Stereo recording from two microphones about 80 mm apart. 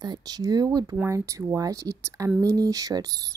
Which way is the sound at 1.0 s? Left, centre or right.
Right.